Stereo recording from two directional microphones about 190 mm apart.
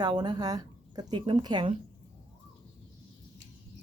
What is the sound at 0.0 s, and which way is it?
Speech, 20° right (ahead or behind).